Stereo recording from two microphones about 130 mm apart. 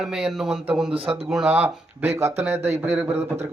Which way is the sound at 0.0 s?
5° right (ahead or behind).